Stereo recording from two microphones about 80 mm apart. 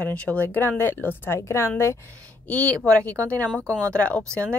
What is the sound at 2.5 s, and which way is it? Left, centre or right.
A woman's voice, centre.